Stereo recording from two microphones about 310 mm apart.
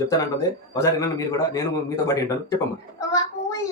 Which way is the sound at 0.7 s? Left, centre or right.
Centre.